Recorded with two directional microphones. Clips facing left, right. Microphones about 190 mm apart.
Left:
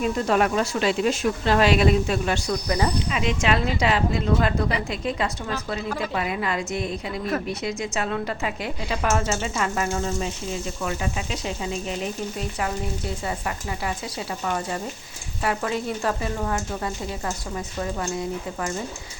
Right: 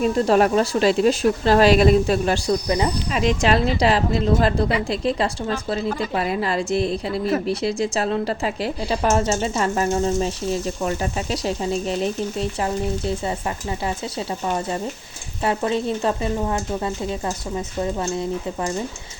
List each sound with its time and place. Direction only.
0.0 s a woman's voice: 35° right (ahead or behind)